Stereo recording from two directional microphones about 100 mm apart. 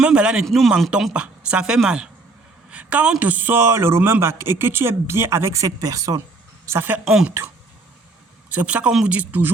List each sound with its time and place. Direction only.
0.0 s a sound: 10° right (ahead or behind)
0.4 s speech: centre (ahead or behind)
0.7 s a man's voice: 10° right (ahead or behind); by 6.2 s 35° right (ahead or behind)
6.7 s a man's voice: 20° right (ahead or behind)
7.0 s speech: 5° right (ahead or behind)
8.4 s speech: 15° right (ahead or behind)